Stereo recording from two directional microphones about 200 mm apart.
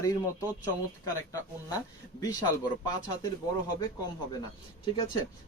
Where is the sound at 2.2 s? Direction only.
20° left (ahead or behind).